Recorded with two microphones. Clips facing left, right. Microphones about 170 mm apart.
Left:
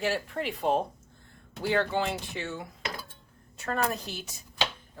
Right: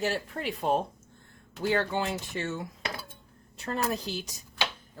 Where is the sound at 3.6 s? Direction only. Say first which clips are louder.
Left 1 dB; 35° right (ahead or behind).